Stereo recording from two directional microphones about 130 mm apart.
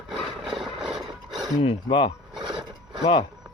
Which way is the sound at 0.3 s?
Centre (ahead or behind).